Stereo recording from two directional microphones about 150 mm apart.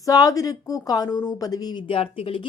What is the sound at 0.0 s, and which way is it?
A woman's voice, 25° left (ahead or behind).